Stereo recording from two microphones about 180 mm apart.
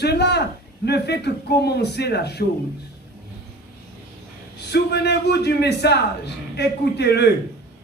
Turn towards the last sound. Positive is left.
turn(degrees=65)  # may be behind; listen again after turning